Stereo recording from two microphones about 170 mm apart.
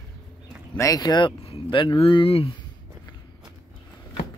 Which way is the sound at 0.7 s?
20° left (ahead or behind).